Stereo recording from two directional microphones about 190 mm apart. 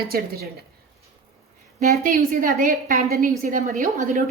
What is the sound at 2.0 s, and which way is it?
A woman's voice, 45° right (ahead or behind).